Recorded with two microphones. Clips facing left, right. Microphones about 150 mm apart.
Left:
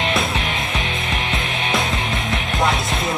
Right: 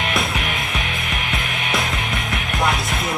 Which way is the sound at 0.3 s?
25° left (ahead or behind).